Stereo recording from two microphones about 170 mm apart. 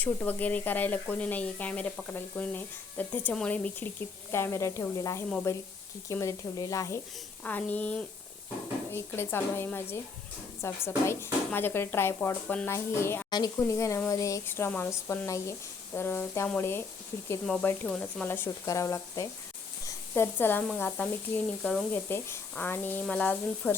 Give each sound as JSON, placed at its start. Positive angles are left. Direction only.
{"t": 0.0, "sound": "speech", "side_deg": 10}
{"t": 17.4, "sound": "speech", "side_deg": 5}